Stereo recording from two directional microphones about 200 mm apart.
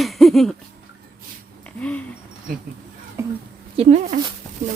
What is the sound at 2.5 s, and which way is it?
Speech, 45° right (ahead or behind).